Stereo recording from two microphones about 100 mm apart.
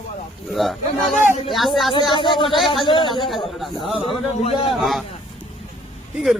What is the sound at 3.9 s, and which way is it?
Speech, 70° left (ahead or behind).